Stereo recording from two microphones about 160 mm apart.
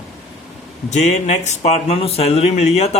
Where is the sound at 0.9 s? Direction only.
45° left (ahead or behind).